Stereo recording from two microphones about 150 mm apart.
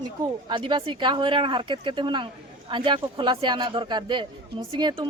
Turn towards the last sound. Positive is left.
turn(degrees=-30)  # may be behind; listen again after turning